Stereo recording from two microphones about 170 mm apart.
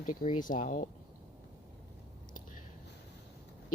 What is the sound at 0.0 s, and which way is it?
Speech, 50° left (ahead or behind).